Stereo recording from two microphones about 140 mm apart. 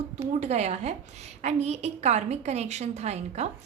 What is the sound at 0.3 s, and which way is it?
A woman's voice, 55° right (ahead or behind).